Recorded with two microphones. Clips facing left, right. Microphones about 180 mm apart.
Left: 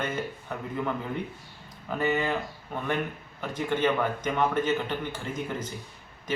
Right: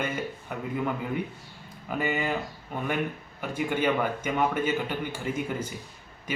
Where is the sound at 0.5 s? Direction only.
10° right (ahead or behind).